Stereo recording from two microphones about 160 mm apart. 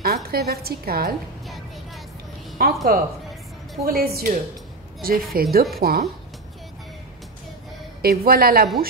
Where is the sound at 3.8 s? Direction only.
70° right (ahead or behind).